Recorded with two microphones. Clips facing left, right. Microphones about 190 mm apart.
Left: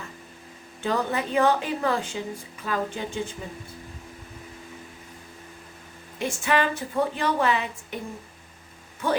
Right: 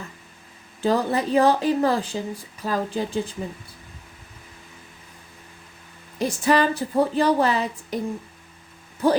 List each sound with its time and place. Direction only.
0.8 s a woman's voice: 35° right (ahead or behind)
6.1 s a woman's voice: 35° right (ahead or behind)
9.0 s a woman's voice: 35° right (ahead or behind)